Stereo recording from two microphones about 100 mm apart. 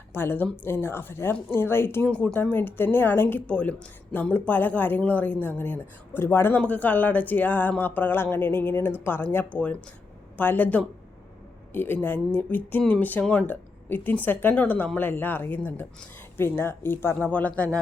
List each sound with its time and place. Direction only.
0.1 s speech: 20° left (ahead or behind)
2.0 s speech: 10° left (ahead or behind)